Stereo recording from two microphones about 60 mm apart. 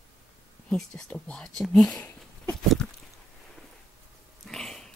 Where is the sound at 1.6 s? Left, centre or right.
Centre.